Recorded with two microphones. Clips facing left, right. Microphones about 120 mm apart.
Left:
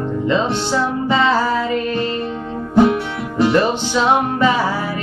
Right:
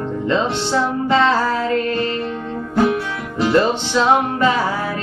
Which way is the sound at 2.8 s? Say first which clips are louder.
Left 4 dB; 25° left (ahead or behind).